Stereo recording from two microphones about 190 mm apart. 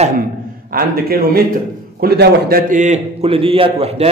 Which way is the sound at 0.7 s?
50° right (ahead or behind).